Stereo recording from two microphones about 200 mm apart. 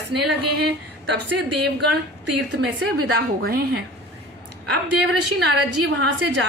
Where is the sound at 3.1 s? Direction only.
50° right (ahead or behind).